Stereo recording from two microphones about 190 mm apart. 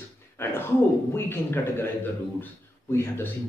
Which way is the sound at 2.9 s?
10° left (ahead or behind).